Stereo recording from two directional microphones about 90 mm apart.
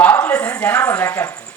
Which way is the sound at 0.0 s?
20° left (ahead or behind).